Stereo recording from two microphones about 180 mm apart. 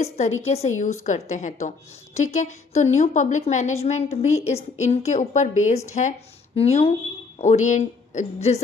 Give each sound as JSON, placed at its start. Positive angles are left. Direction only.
{"t": 0.0, "sound": "a woman's voice", "side_deg": 35}